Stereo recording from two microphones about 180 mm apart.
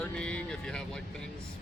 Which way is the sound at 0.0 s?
5° left (ahead or behind).